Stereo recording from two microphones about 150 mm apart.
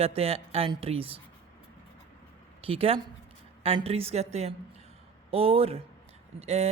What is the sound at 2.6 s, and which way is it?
A woman's voice, 40° right (ahead or behind).